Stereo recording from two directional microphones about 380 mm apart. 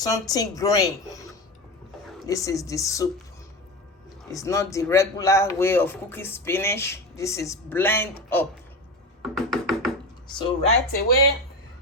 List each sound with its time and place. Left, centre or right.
0.0 s speech: centre
4.3 s speech: centre
9.2 s music: centre
10.2 s speech: centre